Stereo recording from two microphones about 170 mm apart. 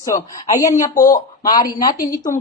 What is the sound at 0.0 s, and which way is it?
Speech, 20° left (ahead or behind).